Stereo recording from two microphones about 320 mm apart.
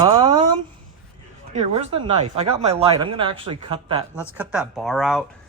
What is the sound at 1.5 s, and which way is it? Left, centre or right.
Speech, centre.